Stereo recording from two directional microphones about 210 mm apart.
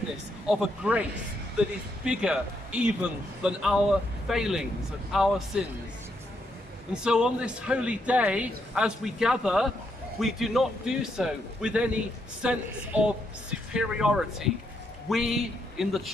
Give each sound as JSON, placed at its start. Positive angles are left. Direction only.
{"t": 0.5, "sound": "a man's voice", "side_deg": -5}
{"t": 6.9, "sound": "a man's voice", "side_deg": -5}